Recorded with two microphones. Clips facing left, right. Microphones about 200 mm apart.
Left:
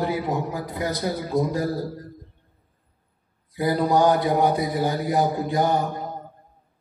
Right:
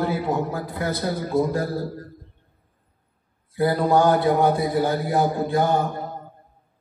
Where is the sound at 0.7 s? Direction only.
20° left (ahead or behind).